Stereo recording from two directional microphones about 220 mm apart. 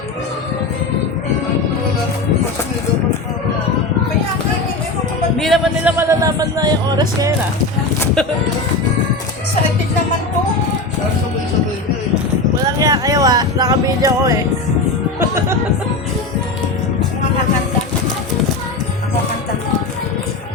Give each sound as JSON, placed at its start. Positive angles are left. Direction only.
{"t": 5.4, "sound": "music", "side_deg": 0}
{"t": 6.0, "sound": "speech", "side_deg": -15}
{"t": 12.5, "sound": "a sound", "side_deg": -15}
{"t": 15.2, "sound": "music", "side_deg": -10}